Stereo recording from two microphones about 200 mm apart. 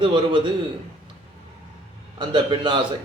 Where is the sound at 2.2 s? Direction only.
25° right (ahead or behind).